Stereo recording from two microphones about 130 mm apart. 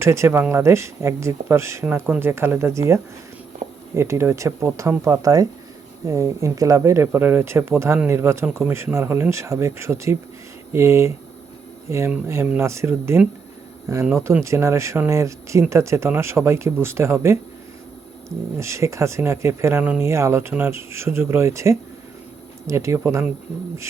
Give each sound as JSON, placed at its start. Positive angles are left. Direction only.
{"t": 0.0, "sound": "speech", "side_deg": -20}
{"t": 3.6, "sound": "a sound", "side_deg": -65}
{"t": 3.9, "sound": "speech", "side_deg": -20}
{"t": 14.3, "sound": "speech", "side_deg": -20}
{"t": 18.5, "sound": "speech", "side_deg": -20}